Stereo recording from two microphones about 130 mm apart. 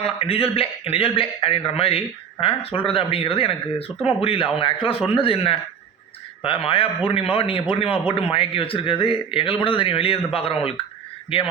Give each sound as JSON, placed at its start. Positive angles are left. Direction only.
{"t": 0.0, "sound": "a man's voice", "side_deg": 50}